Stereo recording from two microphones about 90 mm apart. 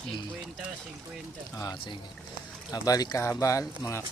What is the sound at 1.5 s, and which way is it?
Speech, 50° left (ahead or behind).